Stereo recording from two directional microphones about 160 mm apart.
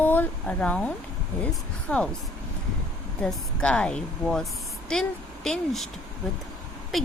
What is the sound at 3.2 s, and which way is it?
A woman's voice, 5° left (ahead or behind).